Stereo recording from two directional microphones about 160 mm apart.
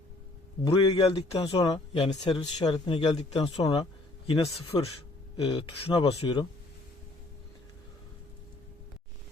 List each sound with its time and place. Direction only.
0.6 s speech: 30° left (ahead or behind)